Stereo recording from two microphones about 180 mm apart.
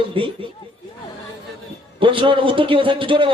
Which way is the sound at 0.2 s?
30° right (ahead or behind).